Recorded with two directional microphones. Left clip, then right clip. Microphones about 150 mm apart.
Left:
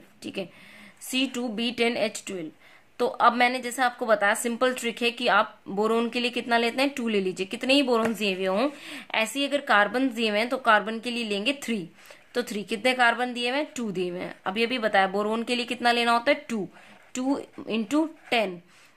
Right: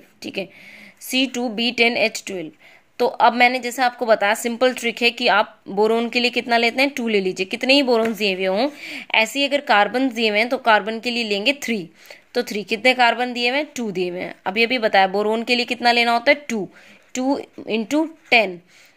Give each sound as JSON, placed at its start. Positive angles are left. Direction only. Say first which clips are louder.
{"t": 0.2, "sound": "speech", "louder": "right 6 dB", "side_deg": -25}